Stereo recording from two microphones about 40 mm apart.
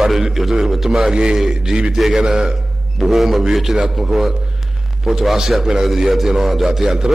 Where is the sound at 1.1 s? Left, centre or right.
Right.